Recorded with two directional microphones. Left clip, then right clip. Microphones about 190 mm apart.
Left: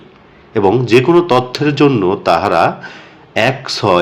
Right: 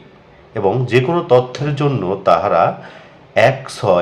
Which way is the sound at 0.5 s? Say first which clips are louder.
Left 5 dB; 20° left (ahead or behind).